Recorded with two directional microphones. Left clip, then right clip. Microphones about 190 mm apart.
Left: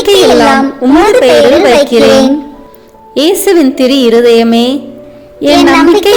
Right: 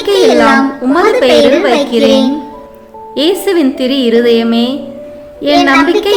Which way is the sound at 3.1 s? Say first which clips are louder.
Left 4 dB; 35° left (ahead or behind).